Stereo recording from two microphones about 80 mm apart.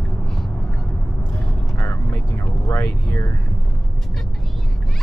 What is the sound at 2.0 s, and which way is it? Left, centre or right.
Vehicle, left.